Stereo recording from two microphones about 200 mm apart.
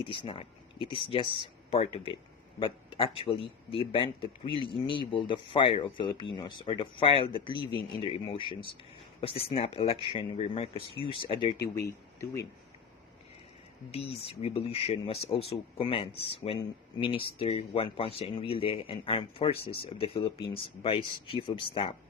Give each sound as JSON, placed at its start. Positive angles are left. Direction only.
{"t": 0.0, "sound": "speech", "side_deg": 25}
{"t": 13.9, "sound": "speech", "side_deg": 30}